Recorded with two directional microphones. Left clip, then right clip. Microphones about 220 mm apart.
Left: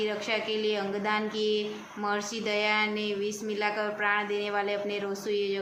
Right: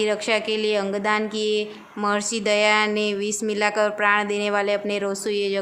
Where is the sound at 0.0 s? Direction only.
50° right (ahead or behind).